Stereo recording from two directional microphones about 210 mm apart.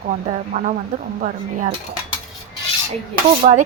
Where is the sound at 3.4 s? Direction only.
30° right (ahead or behind).